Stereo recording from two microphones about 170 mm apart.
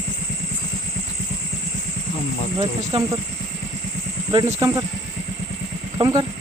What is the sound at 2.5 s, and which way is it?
Speech, 30° right (ahead or behind).